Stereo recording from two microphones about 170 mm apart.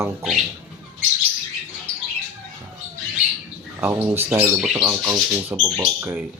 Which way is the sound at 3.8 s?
10° right (ahead or behind).